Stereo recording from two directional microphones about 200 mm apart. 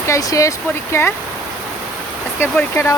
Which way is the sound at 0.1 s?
15° left (ahead or behind).